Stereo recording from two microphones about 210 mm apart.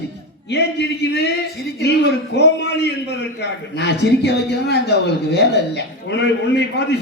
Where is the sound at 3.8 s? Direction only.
50° left (ahead or behind).